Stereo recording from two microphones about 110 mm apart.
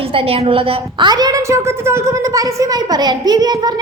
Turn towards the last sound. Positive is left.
turn(degrees=-35)  # may be behind; listen again after turning